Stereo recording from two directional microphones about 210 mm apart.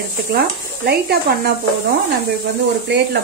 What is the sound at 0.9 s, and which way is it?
A woman's voice, 50° right (ahead or behind).